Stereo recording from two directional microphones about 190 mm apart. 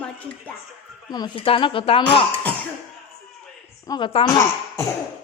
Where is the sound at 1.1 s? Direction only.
25° left (ahead or behind).